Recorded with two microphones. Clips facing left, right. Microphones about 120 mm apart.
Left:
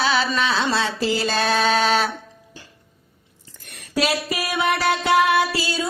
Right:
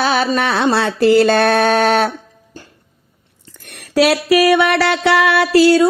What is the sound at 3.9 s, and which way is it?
Music, 75° right (ahead or behind).